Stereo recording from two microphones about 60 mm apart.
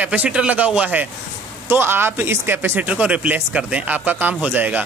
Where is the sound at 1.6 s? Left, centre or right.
Right.